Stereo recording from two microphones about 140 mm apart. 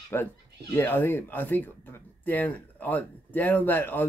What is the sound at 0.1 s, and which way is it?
Speech, 15° left (ahead or behind).